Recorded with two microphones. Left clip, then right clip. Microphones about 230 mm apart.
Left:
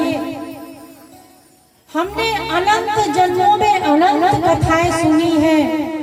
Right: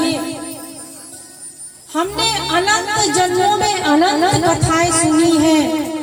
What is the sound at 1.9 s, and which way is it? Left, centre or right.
A woman's voice, left.